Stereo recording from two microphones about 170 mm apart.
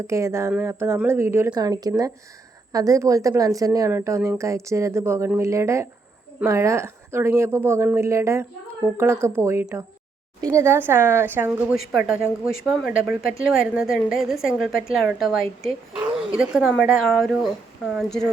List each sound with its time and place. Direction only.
0.1 s a woman's voice: 15° right (ahead or behind)
11.7 s speech: 5° right (ahead or behind)